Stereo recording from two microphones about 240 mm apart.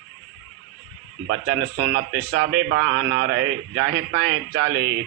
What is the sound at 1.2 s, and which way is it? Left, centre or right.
A man's voice, right.